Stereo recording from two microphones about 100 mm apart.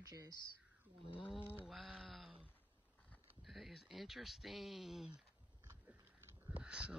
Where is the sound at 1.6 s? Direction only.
Centre (ahead or behind).